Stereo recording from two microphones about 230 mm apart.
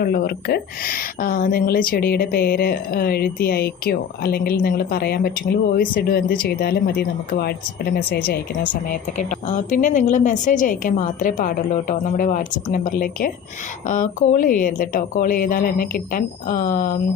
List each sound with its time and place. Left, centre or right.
0.0 s a woman's voice: left
8.9 s a woman's voice: left